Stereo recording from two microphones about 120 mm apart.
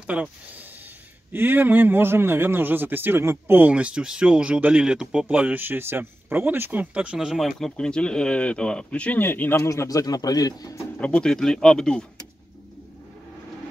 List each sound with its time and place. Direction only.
0.0 s a man's voice: 10° right (ahead or behind); by 10.8 s 30° left (ahead or behind)
11.0 s speech: 10° left (ahead or behind)